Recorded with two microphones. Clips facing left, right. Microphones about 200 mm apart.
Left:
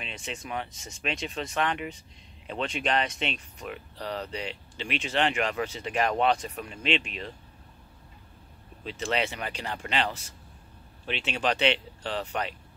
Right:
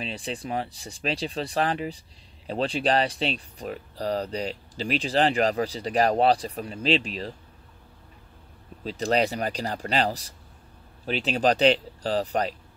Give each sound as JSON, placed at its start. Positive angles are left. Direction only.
{"t": 0.0, "sound": "speech", "side_deg": -35}
{"t": 8.8, "sound": "speech", "side_deg": -40}